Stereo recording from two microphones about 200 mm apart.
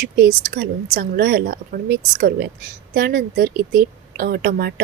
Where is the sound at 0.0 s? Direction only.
50° right (ahead or behind).